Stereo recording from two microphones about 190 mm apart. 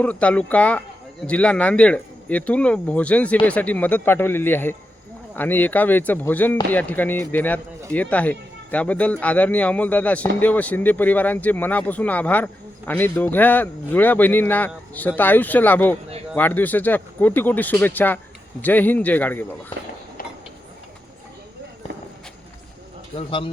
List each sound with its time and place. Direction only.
0.0 s speech: 5° left (ahead or behind)
23.1 s speech: 30° left (ahead or behind)